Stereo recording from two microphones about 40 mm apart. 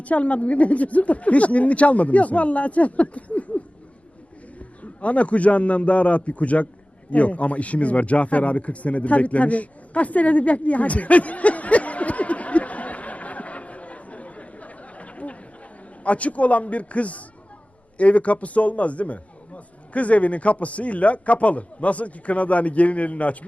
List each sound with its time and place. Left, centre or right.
0.0 s a man's voice: left
4.8 s a man's voice: left
7.1 s a sound: left
16.0 s a man's voice: left